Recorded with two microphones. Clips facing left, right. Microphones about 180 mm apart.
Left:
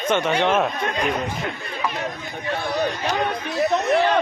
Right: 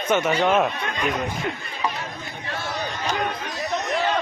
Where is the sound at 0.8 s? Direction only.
40° left (ahead or behind).